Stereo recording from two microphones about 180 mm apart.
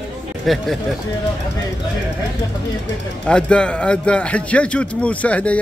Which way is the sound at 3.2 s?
5° left (ahead or behind).